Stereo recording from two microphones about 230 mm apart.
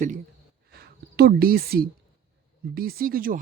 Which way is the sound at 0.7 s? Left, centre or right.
Right.